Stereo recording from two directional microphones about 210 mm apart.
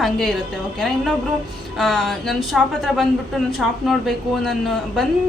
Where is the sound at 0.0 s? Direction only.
Centre (ahead or behind).